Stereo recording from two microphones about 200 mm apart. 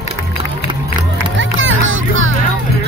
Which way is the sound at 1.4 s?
75° right (ahead or behind).